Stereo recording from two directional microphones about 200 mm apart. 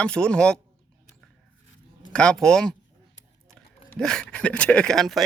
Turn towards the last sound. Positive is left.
turn(degrees=0)  # may be behind; listen again after turning